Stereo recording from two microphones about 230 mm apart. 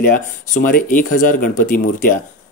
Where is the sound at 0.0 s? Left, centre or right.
Left.